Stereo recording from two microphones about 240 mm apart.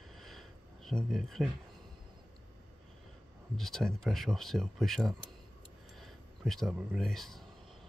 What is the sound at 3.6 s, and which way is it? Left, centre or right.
Speech, centre.